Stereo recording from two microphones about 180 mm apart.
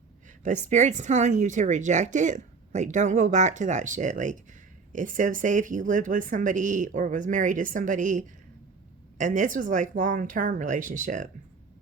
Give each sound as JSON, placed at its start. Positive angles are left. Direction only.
{"t": 0.4, "sound": "a woman's voice", "side_deg": -45}